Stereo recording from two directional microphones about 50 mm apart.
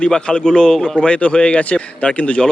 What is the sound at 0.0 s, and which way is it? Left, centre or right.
Speech, left.